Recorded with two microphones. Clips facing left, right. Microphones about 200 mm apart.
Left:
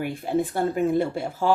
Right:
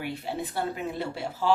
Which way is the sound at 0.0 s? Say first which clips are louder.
Left 8 dB; 50° left (ahead or behind).